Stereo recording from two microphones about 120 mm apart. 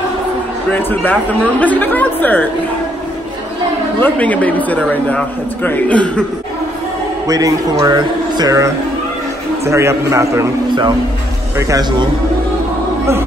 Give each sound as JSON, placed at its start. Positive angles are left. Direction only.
{"t": 0.7, "sound": "a man's voice", "side_deg": 15}
{"t": 4.0, "sound": "a man's voice", "side_deg": 10}
{"t": 7.2, "sound": "a man's voice", "side_deg": -30}
{"t": 11.5, "sound": "speech", "side_deg": -25}